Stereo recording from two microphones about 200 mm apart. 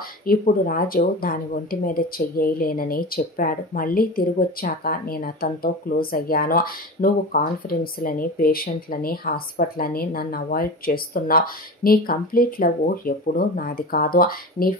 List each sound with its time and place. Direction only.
0.2 s speech: 45° left (ahead or behind)